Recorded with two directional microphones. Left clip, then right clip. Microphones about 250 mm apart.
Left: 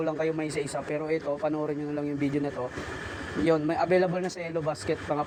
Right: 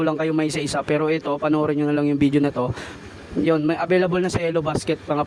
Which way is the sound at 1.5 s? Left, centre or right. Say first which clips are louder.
Right 9 dB; right.